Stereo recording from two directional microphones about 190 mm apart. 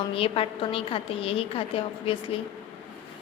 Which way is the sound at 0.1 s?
30° left (ahead or behind).